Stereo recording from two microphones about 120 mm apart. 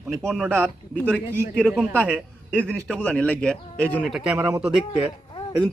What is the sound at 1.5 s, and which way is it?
A man's voice, 5° right (ahead or behind).